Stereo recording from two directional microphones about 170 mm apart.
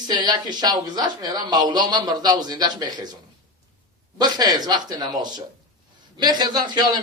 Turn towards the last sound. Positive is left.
turn(degrees=-25)  # may be behind; listen again after turning